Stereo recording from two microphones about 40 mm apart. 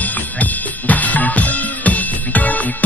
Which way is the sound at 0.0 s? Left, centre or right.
Left.